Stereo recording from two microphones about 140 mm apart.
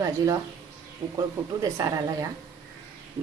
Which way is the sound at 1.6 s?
25° right (ahead or behind).